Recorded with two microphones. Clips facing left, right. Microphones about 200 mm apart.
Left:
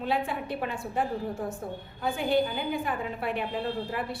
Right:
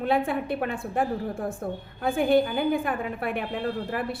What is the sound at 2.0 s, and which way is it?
A woman's voice, 55° right (ahead or behind).